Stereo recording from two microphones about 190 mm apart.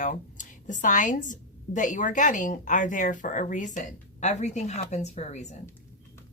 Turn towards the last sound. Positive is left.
turn(degrees=35)  # may be behind; listen again after turning